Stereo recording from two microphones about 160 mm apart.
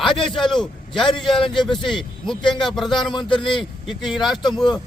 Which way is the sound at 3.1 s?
30° left (ahead or behind).